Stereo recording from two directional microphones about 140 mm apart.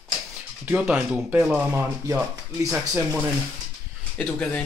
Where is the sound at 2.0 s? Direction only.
25° right (ahead or behind).